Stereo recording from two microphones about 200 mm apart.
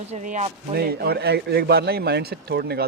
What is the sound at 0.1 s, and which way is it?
Speech, 40° right (ahead or behind).